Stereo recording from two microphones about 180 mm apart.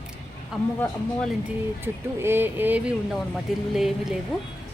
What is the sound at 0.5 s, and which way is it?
Speech, centre (ahead or behind).